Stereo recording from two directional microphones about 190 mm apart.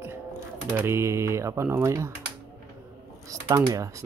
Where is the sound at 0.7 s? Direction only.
10° right (ahead or behind).